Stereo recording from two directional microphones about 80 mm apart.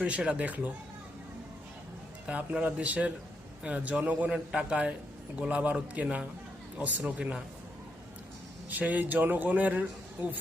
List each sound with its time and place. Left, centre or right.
0.0 s a man's voice: centre
2.2 s a man's voice: centre
8.7 s speech: right